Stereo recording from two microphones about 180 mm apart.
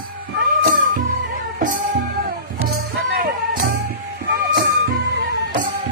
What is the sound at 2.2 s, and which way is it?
Music, 60° right (ahead or behind).